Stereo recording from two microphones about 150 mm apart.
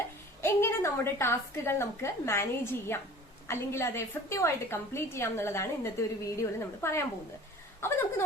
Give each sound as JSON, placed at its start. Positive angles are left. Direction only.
{"t": 0.4, "sound": "a woman's voice", "side_deg": 15}